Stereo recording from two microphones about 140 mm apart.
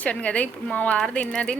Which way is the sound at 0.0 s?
10° left (ahead or behind).